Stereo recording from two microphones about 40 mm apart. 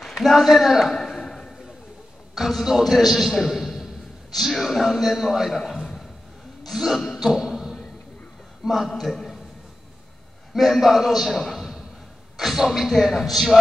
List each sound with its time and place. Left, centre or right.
0.1 s speech: centre
1.1 s chop: centre
2.3 s a man's voice: centre
6.6 s speech: centre
7.1 s a sound: centre
8.6 s speech: centre
10.5 s a man's voice: centre